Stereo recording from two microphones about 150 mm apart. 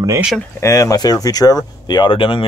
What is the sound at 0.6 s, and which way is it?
Speech, 20° left (ahead or behind).